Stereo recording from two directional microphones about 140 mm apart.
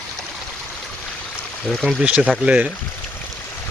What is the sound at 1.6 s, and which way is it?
Speech, 5° left (ahead or behind).